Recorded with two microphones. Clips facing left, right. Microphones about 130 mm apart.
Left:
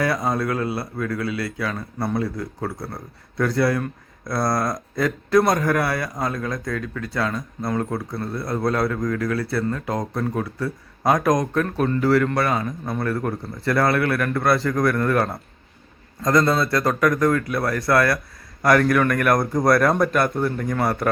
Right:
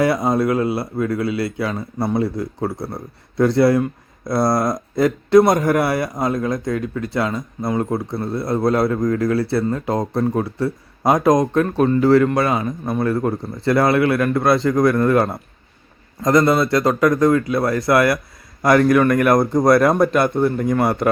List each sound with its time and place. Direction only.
0.0 s speech: 20° right (ahead or behind)